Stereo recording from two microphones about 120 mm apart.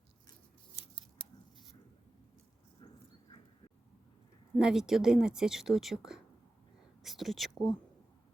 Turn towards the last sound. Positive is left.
turn(degrees=0)  # may be behind; listen again after turning